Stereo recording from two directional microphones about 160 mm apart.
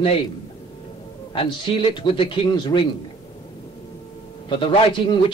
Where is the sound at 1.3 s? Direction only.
30° left (ahead or behind).